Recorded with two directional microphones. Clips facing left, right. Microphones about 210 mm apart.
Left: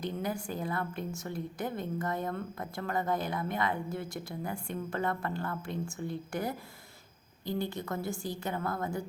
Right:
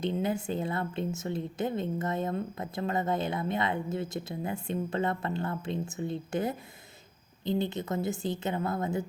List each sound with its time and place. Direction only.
0.0 s a woman's voice: 25° right (ahead or behind)